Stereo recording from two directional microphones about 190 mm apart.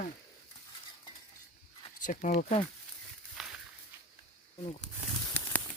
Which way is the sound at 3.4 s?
Centre (ahead or behind).